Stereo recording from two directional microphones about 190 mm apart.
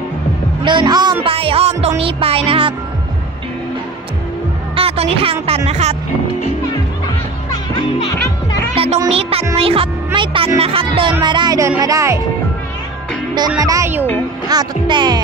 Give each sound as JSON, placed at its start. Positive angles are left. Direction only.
{"t": 0.7, "sound": "speech", "side_deg": -25}
{"t": 4.7, "sound": "speech", "side_deg": -30}
{"t": 8.7, "sound": "speech", "side_deg": -30}
{"t": 11.2, "sound": "music", "side_deg": -20}
{"t": 13.6, "sound": "music", "side_deg": -15}
{"t": 14.5, "sound": "speech", "side_deg": -20}